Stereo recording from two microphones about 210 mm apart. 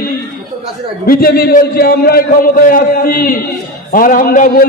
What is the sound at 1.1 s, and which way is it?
A man's voice, 45° left (ahead or behind).